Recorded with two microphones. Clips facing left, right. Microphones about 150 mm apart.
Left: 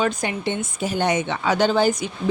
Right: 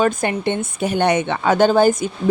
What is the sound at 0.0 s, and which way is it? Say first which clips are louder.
A woman's voice: right 5 dB; 50° right (ahead or behind).